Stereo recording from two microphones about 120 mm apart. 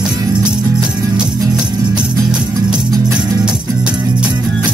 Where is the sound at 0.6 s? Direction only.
30° right (ahead or behind).